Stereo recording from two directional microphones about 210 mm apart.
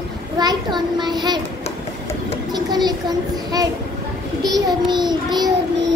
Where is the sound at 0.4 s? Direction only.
20° right (ahead or behind).